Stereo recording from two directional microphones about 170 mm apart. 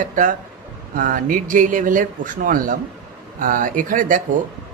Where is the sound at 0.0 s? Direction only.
50° right (ahead or behind).